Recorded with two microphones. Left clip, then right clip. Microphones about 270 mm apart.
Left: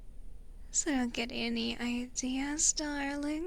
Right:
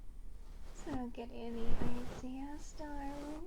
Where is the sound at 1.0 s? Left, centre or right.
Left.